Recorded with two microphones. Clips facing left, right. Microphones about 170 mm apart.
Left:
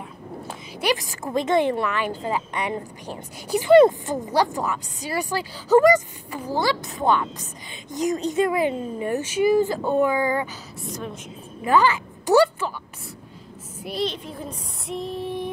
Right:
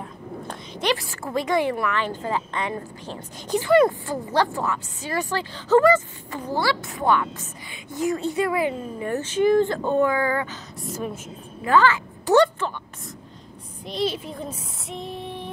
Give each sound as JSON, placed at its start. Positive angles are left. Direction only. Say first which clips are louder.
{"t": 0.5, "sound": "speech", "louder": "left 1 dB", "side_deg": 10}
{"t": 3.7, "sound": "speech", "louder": "left 5 dB", "side_deg": 25}
{"t": 10.8, "sound": "a woman's voice", "louder": "right 2 dB", "side_deg": -5}
{"t": 11.6, "sound": "a woman's voice", "louder": "even", "side_deg": 15}
{"t": 14.0, "sound": "a woman's voice", "louder": "right 3 dB", "side_deg": -5}
{"t": 14.3, "sound": "female singing", "louder": "right 1 dB", "side_deg": 0}